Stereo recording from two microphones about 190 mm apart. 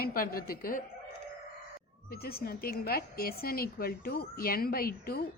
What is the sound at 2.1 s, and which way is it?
A woman's voice, 55° left (ahead or behind).